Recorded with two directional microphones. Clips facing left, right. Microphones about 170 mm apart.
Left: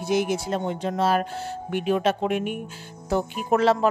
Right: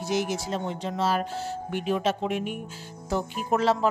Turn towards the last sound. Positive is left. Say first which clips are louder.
# left 3 dB
turn(degrees=65)  # may be behind; listen again after turning